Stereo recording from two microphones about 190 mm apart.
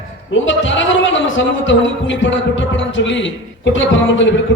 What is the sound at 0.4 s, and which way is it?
A man's voice, 80° left.